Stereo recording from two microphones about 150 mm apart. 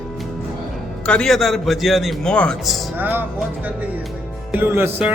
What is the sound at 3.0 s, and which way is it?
Speech, 10° right (ahead or behind).